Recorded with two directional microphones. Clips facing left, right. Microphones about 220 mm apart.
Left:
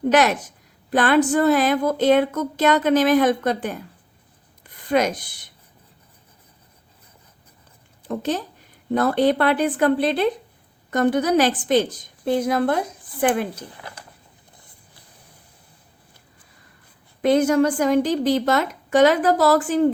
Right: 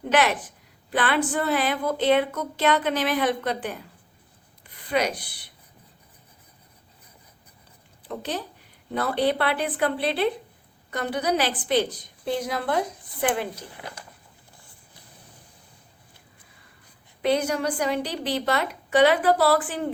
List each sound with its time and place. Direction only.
0.1 s a woman's voice: 45° left (ahead or behind)
4.9 s a woman's voice: 45° left (ahead or behind)
8.0 s a woman's voice: 45° left (ahead or behind)
17.2 s a woman's voice: 50° left (ahead or behind)